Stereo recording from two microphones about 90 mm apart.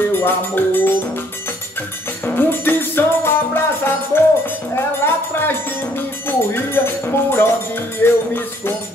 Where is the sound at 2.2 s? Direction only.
25° left (ahead or behind).